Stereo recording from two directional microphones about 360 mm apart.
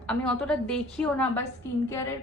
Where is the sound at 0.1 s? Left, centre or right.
Centre.